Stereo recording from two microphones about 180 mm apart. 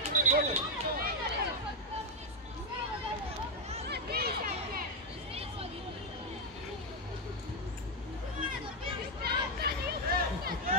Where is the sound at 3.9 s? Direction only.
60° right (ahead or behind).